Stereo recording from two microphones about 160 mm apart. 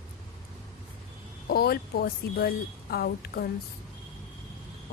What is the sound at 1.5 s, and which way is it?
Speech, 75° left (ahead or behind).